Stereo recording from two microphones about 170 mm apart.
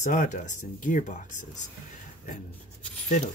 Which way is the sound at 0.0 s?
45° left (ahead or behind).